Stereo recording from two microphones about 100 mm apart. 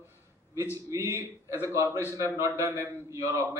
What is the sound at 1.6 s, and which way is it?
A man's voice, 30° right (ahead or behind).